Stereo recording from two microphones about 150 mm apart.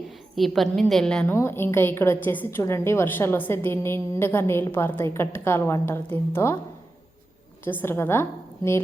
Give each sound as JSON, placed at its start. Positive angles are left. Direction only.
{"t": 0.3, "sound": "a woman's voice", "side_deg": 0}
{"t": 1.3, "sound": "a woman's voice", "side_deg": 15}
{"t": 7.6, "sound": "a woman's voice", "side_deg": 15}